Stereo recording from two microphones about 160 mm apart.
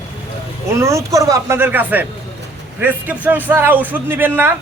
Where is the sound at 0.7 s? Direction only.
20° right (ahead or behind).